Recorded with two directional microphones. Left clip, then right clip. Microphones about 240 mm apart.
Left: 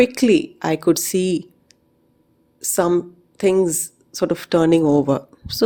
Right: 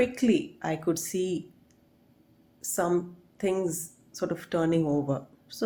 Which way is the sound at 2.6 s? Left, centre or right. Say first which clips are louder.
Left 9 dB; left.